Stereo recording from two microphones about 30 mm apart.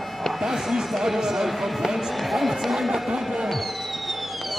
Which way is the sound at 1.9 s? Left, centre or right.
Centre.